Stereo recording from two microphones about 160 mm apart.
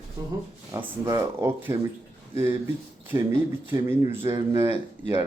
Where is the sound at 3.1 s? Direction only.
20° right (ahead or behind).